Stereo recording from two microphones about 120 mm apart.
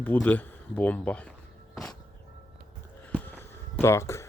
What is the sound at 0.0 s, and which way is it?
Speech, 15° left (ahead or behind).